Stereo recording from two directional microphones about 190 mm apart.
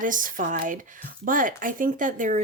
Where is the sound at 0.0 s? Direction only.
45° right (ahead or behind).